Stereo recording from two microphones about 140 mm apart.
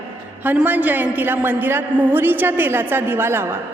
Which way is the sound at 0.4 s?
10° right (ahead or behind).